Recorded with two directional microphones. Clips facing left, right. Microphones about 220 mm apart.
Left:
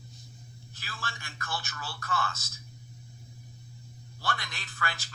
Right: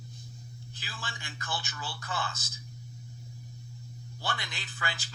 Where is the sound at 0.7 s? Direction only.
15° right (ahead or behind).